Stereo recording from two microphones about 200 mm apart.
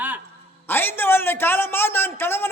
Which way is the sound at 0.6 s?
10° left (ahead or behind).